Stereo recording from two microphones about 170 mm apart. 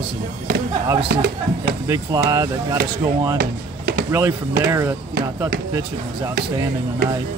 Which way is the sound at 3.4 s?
65° right (ahead or behind).